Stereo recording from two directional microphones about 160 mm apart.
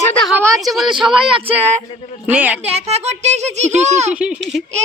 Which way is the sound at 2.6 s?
40° right (ahead or behind).